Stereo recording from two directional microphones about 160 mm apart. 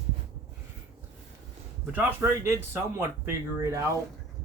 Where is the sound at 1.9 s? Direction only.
15° right (ahead or behind).